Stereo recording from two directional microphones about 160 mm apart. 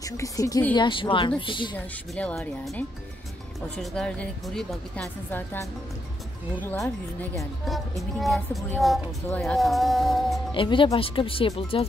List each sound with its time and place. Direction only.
0.0 s a woman's voice: 20° left (ahead or behind)
0.7 s speech: 30° left (ahead or behind)
2.1 s speech: 5° left (ahead or behind)
3.7 s speech: 5° left (ahead or behind)
7.6 s speech: centre (ahead or behind)
10.5 s speech: 30° left (ahead or behind)